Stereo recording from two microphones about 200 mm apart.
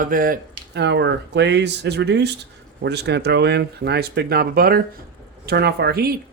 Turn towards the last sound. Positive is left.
turn(degrees=-50)  # may be behind; listen again after turning